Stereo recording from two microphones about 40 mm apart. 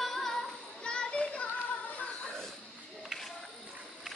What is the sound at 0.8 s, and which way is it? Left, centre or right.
Children playing, left.